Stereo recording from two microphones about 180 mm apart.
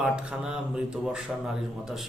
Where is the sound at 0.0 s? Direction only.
5° right (ahead or behind).